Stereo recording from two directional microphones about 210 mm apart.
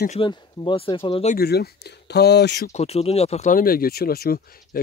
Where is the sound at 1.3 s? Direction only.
50° left (ahead or behind).